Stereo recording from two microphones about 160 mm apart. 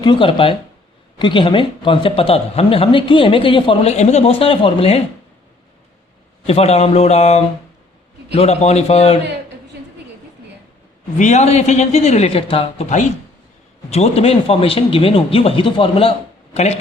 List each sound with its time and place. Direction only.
0.0 s speech: 30° left (ahead or behind)
3.9 s speech: 45° left (ahead or behind)
6.4 s speech: 40° left (ahead or behind)
11.2 s speech: 45° left (ahead or behind)
13.9 s speech: 40° left (ahead or behind)